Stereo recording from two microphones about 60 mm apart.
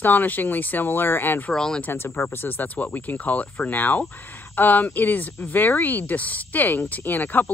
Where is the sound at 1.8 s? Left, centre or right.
Left.